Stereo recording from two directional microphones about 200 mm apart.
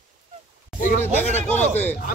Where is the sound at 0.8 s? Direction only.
40° left (ahead or behind).